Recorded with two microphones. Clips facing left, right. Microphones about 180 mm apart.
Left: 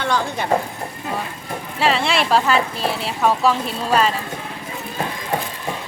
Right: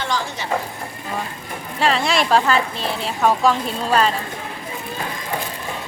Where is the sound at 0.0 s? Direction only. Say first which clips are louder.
Left 3 dB; 55° left (ahead or behind).